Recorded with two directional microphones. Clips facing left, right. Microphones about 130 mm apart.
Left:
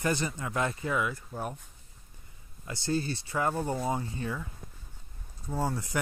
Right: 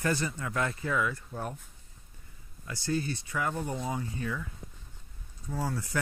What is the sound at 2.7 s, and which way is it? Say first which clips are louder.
Speech: left 1 dB; 25° left (ahead or behind).